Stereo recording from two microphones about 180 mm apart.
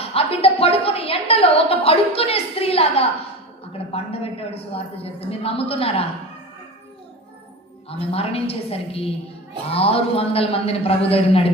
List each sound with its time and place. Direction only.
0.0 s a sound: 30° left (ahead or behind)
3.7 s a woman's voice: 35° left (ahead or behind)
7.9 s a woman's voice: 30° left (ahead or behind)